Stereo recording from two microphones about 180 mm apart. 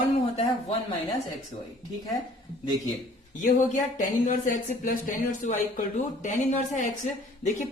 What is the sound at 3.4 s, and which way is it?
A woman's voice, 45° left (ahead or behind).